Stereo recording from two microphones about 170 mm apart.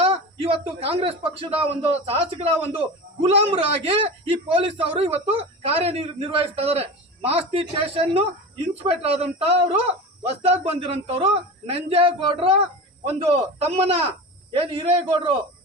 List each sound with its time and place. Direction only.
0.0 s a man's voice: 35° right (ahead or behind)